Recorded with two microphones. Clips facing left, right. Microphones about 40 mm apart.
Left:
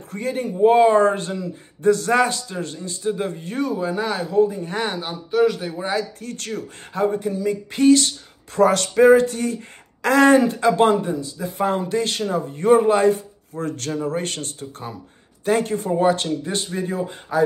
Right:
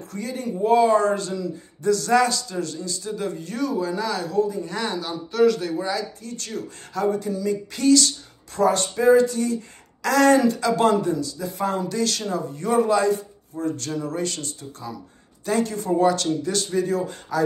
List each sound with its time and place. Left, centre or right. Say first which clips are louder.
0.1 s speech: left 4 dB; left
5.3 s a man's voice: even; centre
5.8 s speech: left 2 dB; left
6.9 s speech: left 2 dB; left
8.5 s speech: left 5 dB; left